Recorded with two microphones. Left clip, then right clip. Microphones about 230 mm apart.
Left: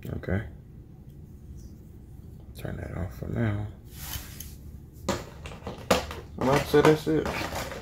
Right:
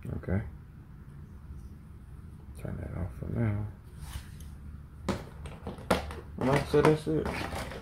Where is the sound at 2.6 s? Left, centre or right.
Centre.